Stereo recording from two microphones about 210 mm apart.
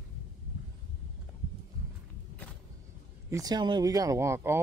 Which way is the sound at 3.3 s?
20° right (ahead or behind).